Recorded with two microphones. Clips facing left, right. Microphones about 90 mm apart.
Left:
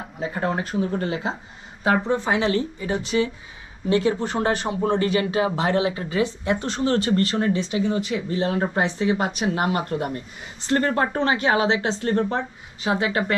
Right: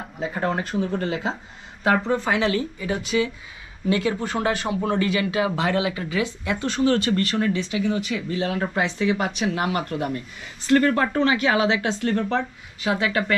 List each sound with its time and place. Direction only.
0.0 s speech: centre (ahead or behind)
1.9 s speech: 15° left (ahead or behind)